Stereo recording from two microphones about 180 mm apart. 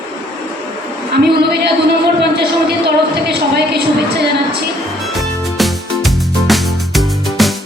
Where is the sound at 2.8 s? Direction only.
70° right (ahead or behind).